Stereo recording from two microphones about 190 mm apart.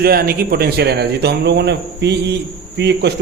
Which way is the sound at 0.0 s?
50° right (ahead or behind).